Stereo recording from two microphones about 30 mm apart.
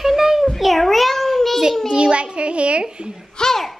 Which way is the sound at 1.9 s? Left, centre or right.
Right.